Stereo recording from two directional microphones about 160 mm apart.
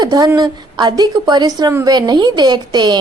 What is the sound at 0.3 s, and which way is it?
A woman's voice, 25° right (ahead or behind).